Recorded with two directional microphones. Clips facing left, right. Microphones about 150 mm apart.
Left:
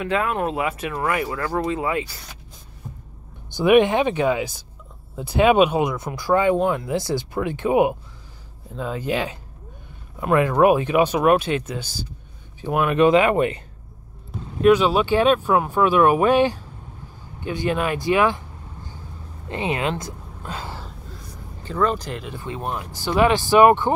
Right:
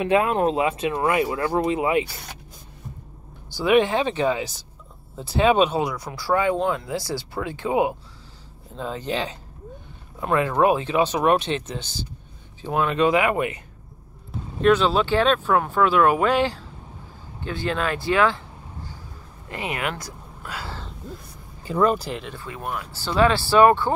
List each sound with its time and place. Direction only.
0.0 s speech: 25° right (ahead or behind)
3.4 s speech: 20° left (ahead or behind)
8.7 s speech: 10° left (ahead or behind)
10.6 s speech: 15° left (ahead or behind)
14.6 s speech: 10° left (ahead or behind)
19.5 s a woman's voice: 25° left (ahead or behind)
21.6 s speech: 10° right (ahead or behind)
22.3 s speech: 20° left (ahead or behind)